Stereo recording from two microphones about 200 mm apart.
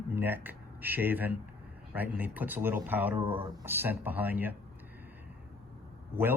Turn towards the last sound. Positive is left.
turn(degrees=-10)  # may be behind; listen again after turning